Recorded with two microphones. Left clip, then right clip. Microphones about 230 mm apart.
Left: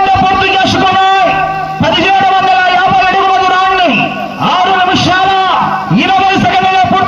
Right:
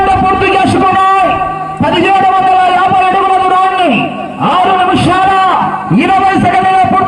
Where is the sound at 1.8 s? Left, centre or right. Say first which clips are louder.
Even; left.